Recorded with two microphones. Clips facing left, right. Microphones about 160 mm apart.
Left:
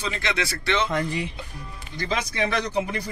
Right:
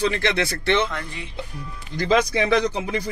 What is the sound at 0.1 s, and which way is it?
Speech, 55° right (ahead or behind).